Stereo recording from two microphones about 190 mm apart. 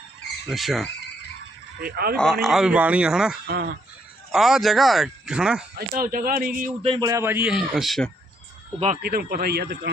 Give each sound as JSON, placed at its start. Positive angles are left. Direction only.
{"t": 0.4, "sound": "speech", "side_deg": 0}
{"t": 1.8, "sound": "speech", "side_deg": -55}
{"t": 2.1, "sound": "speech", "side_deg": 5}
{"t": 3.4, "sound": "speech", "side_deg": -50}
{"t": 4.3, "sound": "speech", "side_deg": 0}
{"t": 5.7, "sound": "speech", "side_deg": -50}
{"t": 6.8, "sound": "speech", "side_deg": -30}
{"t": 7.1, "sound": "a man's voice", "side_deg": -15}
{"t": 7.5, "sound": "speech", "side_deg": 0}
{"t": 9.0, "sound": "speech", "side_deg": -55}